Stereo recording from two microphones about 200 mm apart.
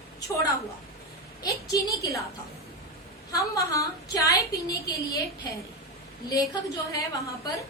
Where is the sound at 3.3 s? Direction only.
15° left (ahead or behind).